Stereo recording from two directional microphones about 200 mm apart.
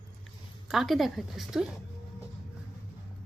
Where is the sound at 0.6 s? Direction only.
Centre (ahead or behind).